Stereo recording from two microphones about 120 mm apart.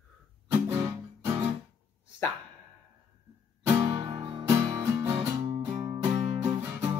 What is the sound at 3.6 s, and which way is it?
Music, 35° right (ahead or behind).